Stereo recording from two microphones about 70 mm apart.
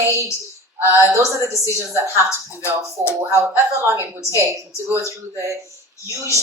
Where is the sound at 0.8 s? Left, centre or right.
Right.